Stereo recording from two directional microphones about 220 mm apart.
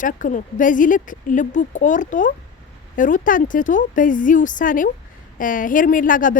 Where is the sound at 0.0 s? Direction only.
35° left (ahead or behind).